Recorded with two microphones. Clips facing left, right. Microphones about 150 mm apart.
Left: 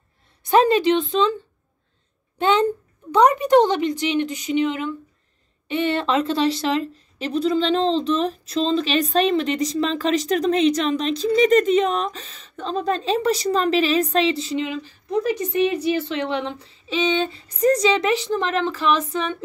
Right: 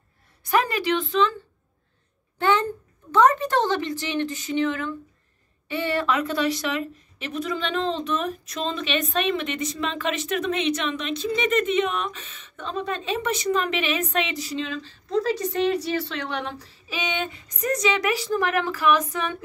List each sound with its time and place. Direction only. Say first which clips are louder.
0.4 s a woman's voice: left 7 dB; 25° left (ahead or behind)
2.3 s a woman's voice: left 4 dB; 20° left (ahead or behind)
14.6 s a woman's voice: left 4 dB; 15° left (ahead or behind)